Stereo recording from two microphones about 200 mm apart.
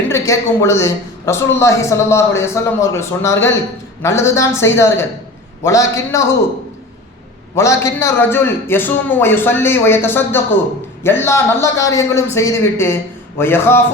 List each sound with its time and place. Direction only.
0.1 s a woman's voice: 15° left (ahead or behind)
7.5 s a woman's voice: 15° left (ahead or behind)